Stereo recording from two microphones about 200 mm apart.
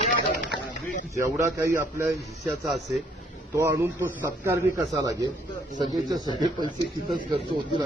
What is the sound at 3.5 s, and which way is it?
A man's voice, 15° right (ahead or behind).